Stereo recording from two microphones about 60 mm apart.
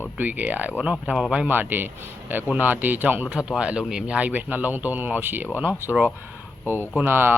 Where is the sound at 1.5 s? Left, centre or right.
Right.